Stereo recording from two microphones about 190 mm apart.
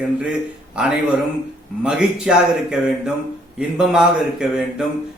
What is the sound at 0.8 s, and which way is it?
A man's voice, 5° right (ahead or behind).